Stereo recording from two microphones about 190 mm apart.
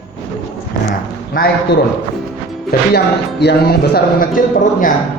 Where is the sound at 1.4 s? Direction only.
50° left (ahead or behind).